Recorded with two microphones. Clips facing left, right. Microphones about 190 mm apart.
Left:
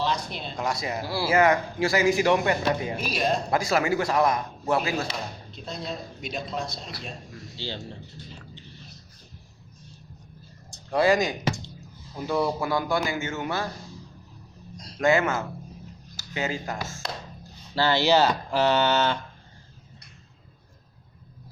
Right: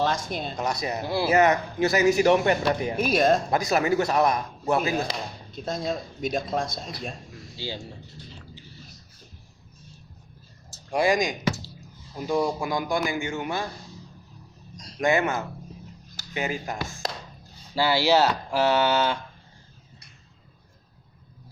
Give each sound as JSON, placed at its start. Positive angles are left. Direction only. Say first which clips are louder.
{"t": 0.0, "sound": "speech", "louder": "right 2 dB", "side_deg": -50}
{"t": 0.5, "sound": "speech", "louder": "left 1 dB", "side_deg": -20}
{"t": 3.0, "sound": "speech", "louder": "right 6 dB", "side_deg": -50}
{"t": 3.5, "sound": "speech", "louder": "right 1 dB", "side_deg": -20}
{"t": 5.0, "sound": "speech", "louder": "right 1 dB", "side_deg": -45}
{"t": 7.5, "sound": "speech", "louder": "right 1 dB", "side_deg": -10}
{"t": 10.9, "sound": "a man's voice", "louder": "left 1 dB", "side_deg": -15}
{"t": 15.0, "sound": "a man's voice", "louder": "left 1 dB", "side_deg": -15}